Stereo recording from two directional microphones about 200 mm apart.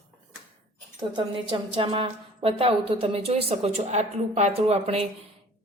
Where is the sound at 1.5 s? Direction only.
25° right (ahead or behind).